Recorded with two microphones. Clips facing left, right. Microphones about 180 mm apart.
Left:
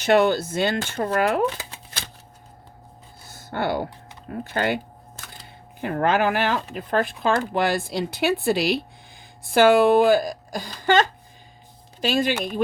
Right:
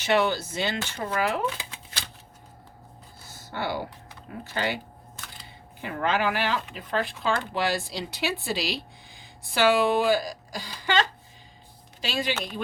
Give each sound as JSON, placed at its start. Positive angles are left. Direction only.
{"t": 0.0, "sound": "speech", "side_deg": 50}
{"t": 3.3, "sound": "a sound", "side_deg": 50}
{"t": 4.3, "sound": "speech", "side_deg": 55}
{"t": 12.3, "sound": "speech", "side_deg": 10}